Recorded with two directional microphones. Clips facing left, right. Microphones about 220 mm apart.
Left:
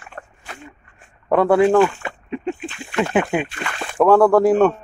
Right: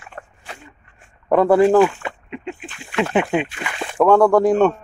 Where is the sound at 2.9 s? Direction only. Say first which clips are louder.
Even; 5° left (ahead or behind).